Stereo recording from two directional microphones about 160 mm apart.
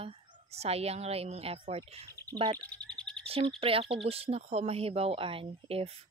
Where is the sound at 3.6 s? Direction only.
35° right (ahead or behind).